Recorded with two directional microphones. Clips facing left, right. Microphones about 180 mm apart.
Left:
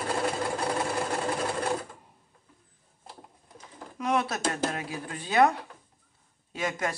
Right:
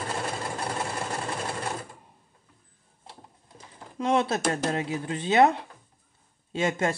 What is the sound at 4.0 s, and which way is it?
Speech, 25° right (ahead or behind).